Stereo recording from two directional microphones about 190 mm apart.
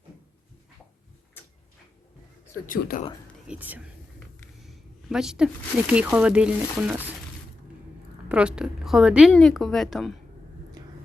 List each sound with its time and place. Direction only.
1.4 s a sound: 10° left (ahead or behind)
2.6 s speech: 50° left (ahead or behind)
3.5 s speech: 5° right (ahead or behind)
4.6 s a sound: centre (ahead or behind)
5.9 s speech: 5° right (ahead or behind)
8.3 s speech: 5° right (ahead or behind)